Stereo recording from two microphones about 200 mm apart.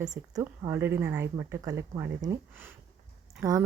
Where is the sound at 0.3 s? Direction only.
15° right (ahead or behind).